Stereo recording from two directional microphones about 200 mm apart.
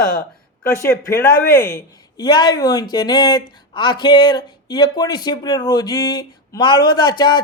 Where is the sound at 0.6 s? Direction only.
10° left (ahead or behind).